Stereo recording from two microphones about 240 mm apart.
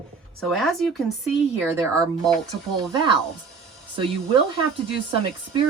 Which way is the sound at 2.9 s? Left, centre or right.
Centre.